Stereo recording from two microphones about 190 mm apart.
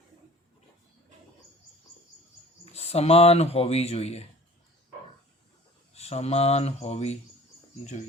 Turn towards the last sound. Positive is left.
turn(degrees=35)  # may be behind; listen again after turning